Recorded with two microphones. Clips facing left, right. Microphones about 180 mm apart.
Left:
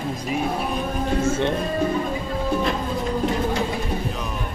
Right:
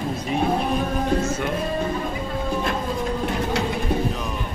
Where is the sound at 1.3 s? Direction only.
30° left (ahead or behind).